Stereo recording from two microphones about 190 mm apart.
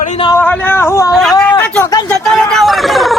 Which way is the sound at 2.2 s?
Centre (ahead or behind).